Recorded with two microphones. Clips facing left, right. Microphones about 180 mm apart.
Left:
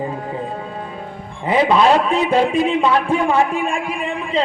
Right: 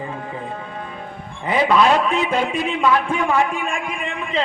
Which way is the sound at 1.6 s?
30° left (ahead or behind).